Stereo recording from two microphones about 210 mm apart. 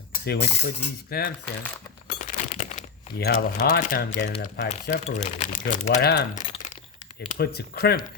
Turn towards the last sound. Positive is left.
turn(degrees=50)  # may be behind; listen again after turning